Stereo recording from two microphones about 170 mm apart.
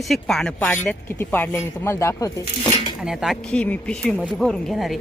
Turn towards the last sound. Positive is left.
turn(degrees=0)  # may be behind; listen again after turning